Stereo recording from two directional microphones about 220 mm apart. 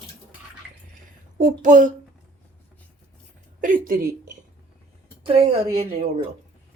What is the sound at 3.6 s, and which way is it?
Speech, 40° right (ahead or behind).